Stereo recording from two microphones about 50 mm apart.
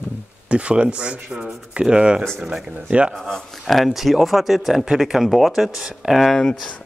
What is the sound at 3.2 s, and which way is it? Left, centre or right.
Speech, centre.